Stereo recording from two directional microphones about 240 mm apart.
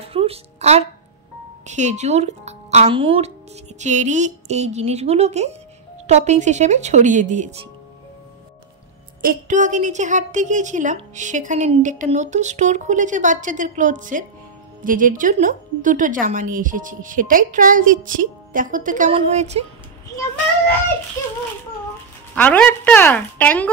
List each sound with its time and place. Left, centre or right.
0.0 s a child's voice: right
9.2 s a woman's voice: right
22.3 s a woman's voice: centre